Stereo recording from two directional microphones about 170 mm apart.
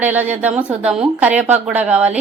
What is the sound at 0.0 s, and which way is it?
A woman's voice, 10° right (ahead or behind).